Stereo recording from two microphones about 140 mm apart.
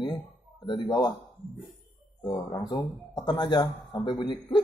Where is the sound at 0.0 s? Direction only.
35° left (ahead or behind).